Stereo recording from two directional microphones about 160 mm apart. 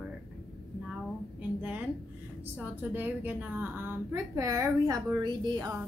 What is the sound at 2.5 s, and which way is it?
A woman's voice, 10° right (ahead or behind).